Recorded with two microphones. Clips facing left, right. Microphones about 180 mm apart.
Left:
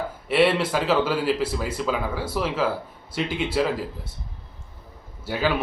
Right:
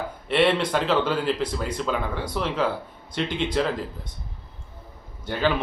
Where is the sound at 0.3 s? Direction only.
5° left (ahead or behind).